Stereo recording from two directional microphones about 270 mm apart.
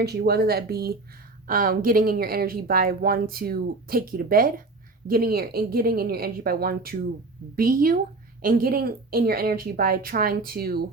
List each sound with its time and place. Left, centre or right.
0.0 s speech: right